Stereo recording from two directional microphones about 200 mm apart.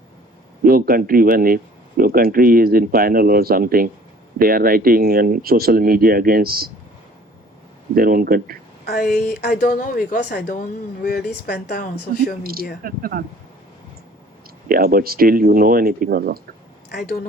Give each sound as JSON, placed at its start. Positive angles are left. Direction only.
{"t": 0.6, "sound": "speech", "side_deg": -45}
{"t": 7.9, "sound": "speech", "side_deg": -45}
{"t": 8.9, "sound": "speech", "side_deg": 45}
{"t": 12.4, "sound": "speech", "side_deg": -50}
{"t": 14.7, "sound": "speech", "side_deg": -50}